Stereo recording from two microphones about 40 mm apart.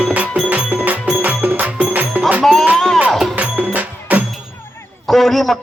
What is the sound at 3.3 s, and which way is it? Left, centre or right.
Music, right.